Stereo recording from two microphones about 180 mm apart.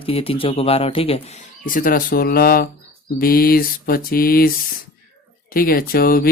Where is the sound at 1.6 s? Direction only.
50° left (ahead or behind).